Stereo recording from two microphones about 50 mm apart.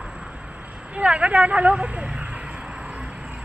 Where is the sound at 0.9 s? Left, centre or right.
Right.